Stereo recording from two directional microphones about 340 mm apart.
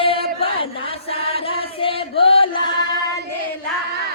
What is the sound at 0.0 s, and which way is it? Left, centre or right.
Chant, centre.